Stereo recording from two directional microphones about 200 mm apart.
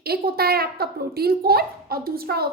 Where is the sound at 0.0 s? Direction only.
50° right (ahead or behind).